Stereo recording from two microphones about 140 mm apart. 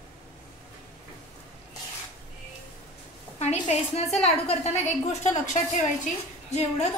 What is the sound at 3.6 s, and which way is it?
Speech, 50° left (ahead or behind).